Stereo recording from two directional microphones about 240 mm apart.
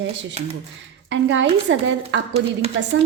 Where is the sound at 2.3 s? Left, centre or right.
Right.